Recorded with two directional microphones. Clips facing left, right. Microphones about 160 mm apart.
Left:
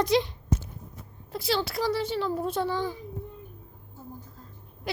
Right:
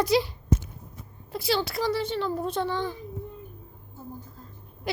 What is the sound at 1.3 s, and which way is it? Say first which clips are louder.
A child's voice: right 1 dB; 5° right (ahead or behind).